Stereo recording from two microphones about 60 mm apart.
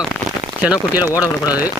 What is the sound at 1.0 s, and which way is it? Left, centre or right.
Speech, left.